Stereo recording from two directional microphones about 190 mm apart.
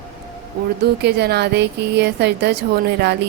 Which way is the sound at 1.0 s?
60° right (ahead or behind).